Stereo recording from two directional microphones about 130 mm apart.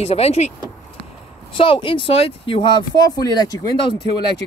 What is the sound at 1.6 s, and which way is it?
Speech, 40° left (ahead or behind).